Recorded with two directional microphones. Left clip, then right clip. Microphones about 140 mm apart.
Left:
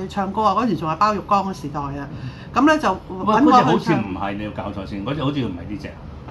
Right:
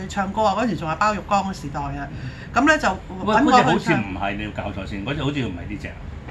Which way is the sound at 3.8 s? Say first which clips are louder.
Even; 10° left (ahead or behind).